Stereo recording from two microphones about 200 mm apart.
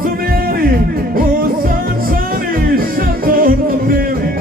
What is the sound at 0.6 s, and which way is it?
Music, 45° right (ahead or behind).